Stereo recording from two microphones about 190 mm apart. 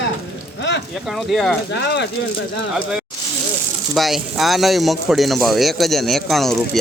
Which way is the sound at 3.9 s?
Centre (ahead or behind).